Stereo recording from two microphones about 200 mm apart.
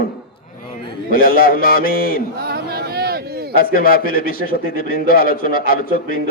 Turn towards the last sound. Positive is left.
turn(degrees=45)  # may be behind; listen again after turning